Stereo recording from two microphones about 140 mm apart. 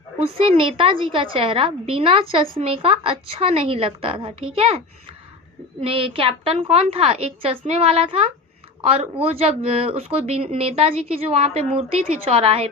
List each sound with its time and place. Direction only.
0.2 s a woman's voice: 40° right (ahead or behind)
5.8 s speech: 40° right (ahead or behind)